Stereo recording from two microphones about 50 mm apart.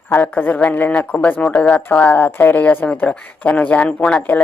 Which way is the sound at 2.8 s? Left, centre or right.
Left.